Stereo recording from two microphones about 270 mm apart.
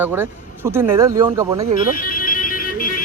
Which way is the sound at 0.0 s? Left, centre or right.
Centre.